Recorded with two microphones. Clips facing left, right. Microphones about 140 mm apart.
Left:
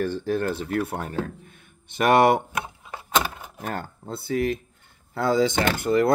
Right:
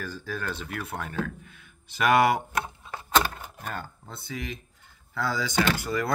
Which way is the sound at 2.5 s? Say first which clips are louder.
Even; 15° left (ahead or behind).